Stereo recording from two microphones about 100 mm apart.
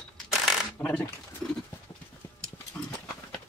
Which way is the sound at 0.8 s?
15° left (ahead or behind).